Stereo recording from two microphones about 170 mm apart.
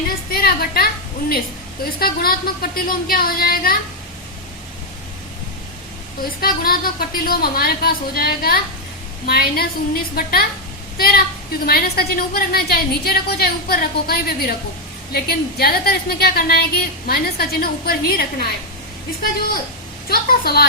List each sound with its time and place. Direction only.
0.3 s a sound: 60° left (ahead or behind)
2.0 s a woman's voice: 60° left (ahead or behind)
6.4 s a woman's voice: 60° left (ahead or behind)
20.1 s a woman's voice: 65° left (ahead or behind)